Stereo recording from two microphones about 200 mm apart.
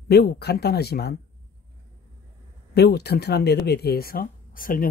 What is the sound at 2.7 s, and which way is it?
Speech, 55° left (ahead or behind).